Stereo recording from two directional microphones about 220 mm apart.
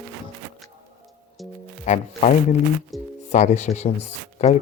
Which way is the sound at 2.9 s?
Centre (ahead or behind).